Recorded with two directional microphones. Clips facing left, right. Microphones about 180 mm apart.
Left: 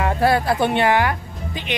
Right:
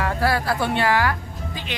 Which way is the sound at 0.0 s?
25° left (ahead or behind).